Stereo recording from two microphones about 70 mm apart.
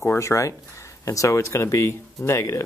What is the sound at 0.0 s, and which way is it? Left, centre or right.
Speech, left.